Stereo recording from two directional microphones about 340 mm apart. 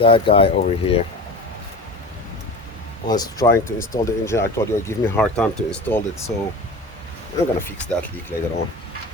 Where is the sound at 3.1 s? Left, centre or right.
Centre.